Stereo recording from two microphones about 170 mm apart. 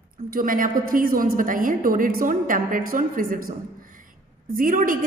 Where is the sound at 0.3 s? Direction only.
55° right (ahead or behind).